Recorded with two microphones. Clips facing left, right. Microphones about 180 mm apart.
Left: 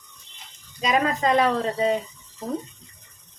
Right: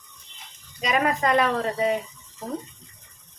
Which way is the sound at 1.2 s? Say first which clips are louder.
Left 1 dB; 25° left (ahead or behind).